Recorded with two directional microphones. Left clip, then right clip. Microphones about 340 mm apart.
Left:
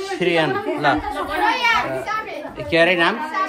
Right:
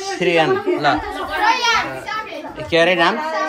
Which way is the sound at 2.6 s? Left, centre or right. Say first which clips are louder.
Right 1 dB; centre.